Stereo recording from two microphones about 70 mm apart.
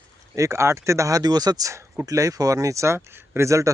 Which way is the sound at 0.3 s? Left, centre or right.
Right.